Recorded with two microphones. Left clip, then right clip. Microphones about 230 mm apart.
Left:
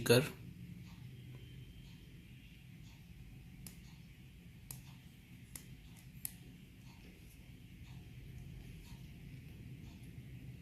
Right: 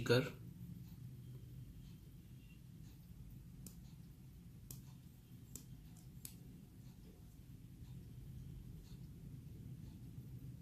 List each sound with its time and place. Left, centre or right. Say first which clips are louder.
0.0 s speech: left 5 dB; left